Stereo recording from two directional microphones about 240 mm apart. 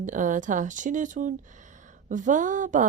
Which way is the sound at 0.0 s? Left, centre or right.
Right.